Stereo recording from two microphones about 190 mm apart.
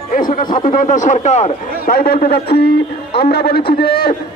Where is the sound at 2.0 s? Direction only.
55° left (ahead or behind).